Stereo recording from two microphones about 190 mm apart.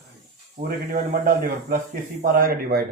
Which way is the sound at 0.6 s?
40° right (ahead or behind).